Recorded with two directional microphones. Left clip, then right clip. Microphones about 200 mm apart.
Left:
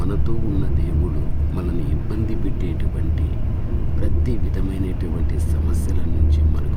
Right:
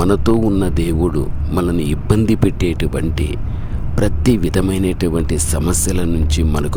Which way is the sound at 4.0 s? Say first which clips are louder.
Right 14 dB; 60° right (ahead or behind).